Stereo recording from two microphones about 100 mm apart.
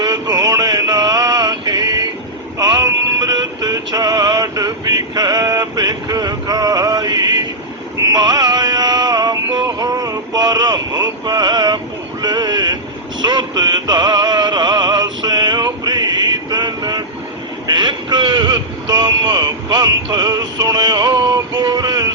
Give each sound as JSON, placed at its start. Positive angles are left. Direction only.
{"t": 0.0, "sound": "music", "side_deg": -40}
{"t": 12.2, "sound": "boat", "side_deg": -45}
{"t": 13.2, "sound": "music", "side_deg": -45}
{"t": 17.7, "sound": "vehicle", "side_deg": -45}